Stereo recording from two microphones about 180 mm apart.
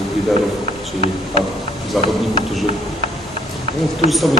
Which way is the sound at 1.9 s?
Centre (ahead or behind).